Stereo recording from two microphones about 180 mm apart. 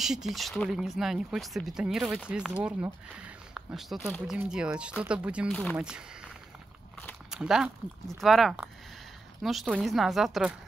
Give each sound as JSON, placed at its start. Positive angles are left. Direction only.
{"t": 0.0, "sound": "speech", "side_deg": 0}
{"t": 7.2, "sound": "speech", "side_deg": -5}